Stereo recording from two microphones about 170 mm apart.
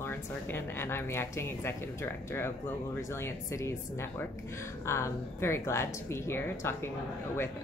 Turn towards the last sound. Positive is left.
turn(degrees=15)  # may be behind; listen again after turning